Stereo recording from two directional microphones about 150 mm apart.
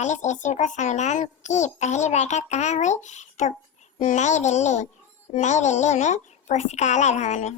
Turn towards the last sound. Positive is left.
turn(degrees=50)  # may be behind; listen again after turning